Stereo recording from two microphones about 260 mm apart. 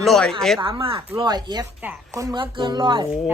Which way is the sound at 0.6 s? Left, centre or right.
Centre.